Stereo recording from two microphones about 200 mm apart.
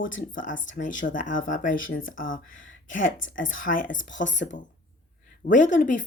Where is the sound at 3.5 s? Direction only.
40° left (ahead or behind).